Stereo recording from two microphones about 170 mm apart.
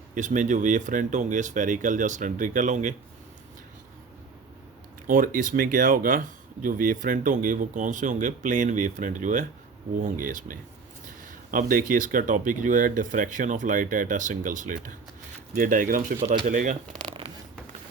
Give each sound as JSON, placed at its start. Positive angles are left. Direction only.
{"t": 0.1, "sound": "speech", "side_deg": -50}
{"t": 5.0, "sound": "speech", "side_deg": -55}